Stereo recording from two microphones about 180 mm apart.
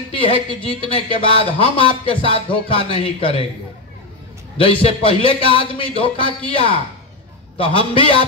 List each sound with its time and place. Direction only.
0.1 s a woman's voice: 30° left (ahead or behind)
4.6 s speech: 30° left (ahead or behind)